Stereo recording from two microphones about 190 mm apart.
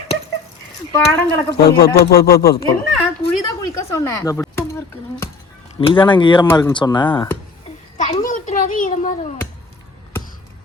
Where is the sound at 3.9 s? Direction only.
15° left (ahead or behind).